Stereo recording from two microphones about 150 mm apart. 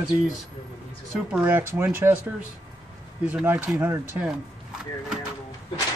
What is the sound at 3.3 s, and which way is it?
Speech, 15° right (ahead or behind).